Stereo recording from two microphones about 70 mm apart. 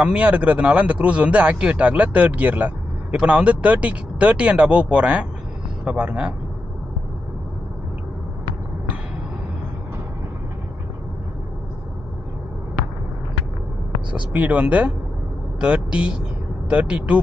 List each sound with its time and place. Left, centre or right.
0.0 s speech: centre
14.3 s speech: right